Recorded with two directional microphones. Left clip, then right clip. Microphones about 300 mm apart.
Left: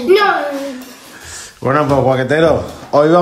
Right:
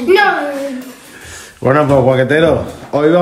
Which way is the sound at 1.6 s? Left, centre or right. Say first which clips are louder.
Right 2 dB; centre.